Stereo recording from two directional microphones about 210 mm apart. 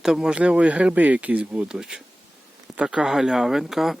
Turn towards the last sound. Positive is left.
turn(degrees=0)  # may be behind; listen again after turning